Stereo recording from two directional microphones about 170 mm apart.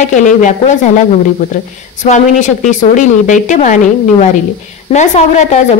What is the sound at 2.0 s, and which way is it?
A woman's voice, 45° left (ahead or behind).